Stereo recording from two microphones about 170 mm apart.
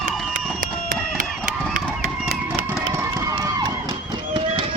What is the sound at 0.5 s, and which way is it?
Run, 50° right (ahead or behind).